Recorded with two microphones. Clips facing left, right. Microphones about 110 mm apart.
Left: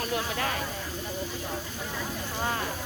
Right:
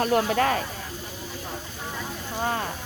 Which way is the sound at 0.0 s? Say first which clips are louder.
Right 8 dB; 55° right (ahead or behind).